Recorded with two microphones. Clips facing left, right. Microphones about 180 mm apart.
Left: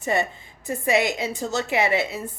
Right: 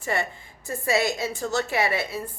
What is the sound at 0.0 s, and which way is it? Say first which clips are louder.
A woman's voice: left 4 dB; 20° left (ahead or behind).